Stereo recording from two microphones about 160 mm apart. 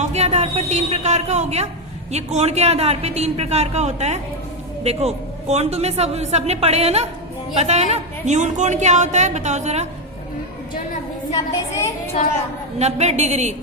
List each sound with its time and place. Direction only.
0.0 s a man's voice: 45° right (ahead or behind)
12.8 s a man's voice: 45° right (ahead or behind)